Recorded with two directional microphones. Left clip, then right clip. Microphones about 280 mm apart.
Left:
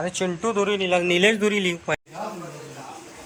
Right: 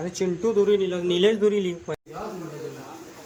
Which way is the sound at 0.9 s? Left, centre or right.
Left.